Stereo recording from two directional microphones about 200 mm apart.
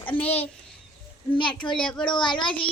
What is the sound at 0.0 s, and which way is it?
Speech, 10° left (ahead or behind).